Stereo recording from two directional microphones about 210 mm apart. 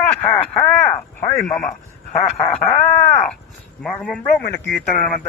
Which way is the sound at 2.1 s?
30° left (ahead or behind).